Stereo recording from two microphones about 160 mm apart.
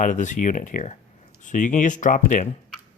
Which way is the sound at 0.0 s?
50° left (ahead or behind).